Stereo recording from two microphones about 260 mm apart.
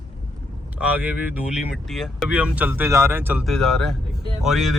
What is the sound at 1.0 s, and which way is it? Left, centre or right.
Speech, centre.